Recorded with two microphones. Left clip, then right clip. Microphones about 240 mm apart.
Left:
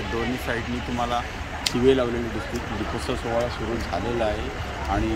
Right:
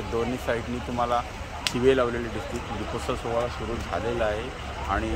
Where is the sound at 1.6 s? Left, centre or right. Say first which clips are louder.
Left 1 dB; centre.